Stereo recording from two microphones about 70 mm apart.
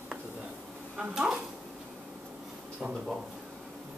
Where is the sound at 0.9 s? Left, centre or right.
Centre.